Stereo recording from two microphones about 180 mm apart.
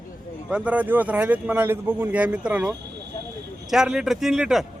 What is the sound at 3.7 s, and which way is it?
Speech, 5° right (ahead or behind).